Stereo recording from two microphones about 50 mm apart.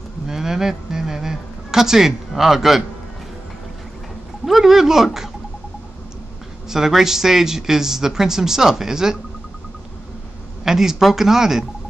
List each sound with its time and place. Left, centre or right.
0.3 s a sound: centre
4.5 s speech: centre
6.7 s speech: centre
10.6 s speech: centre